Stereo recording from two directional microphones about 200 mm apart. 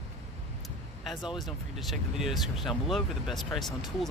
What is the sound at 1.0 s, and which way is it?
Speech, centre (ahead or behind).